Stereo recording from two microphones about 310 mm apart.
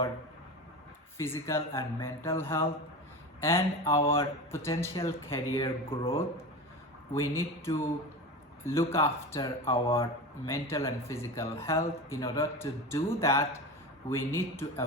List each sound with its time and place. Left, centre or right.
1.2 s speech: centre